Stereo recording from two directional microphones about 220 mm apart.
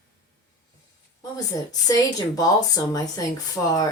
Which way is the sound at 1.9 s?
15° left (ahead or behind).